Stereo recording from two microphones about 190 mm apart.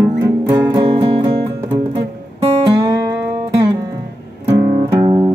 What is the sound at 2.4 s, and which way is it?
Music, 20° right (ahead or behind).